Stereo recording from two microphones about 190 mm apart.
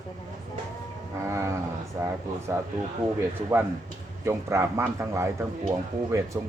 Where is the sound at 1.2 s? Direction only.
15° right (ahead or behind).